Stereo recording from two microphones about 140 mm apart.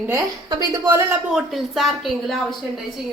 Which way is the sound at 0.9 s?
20° right (ahead or behind).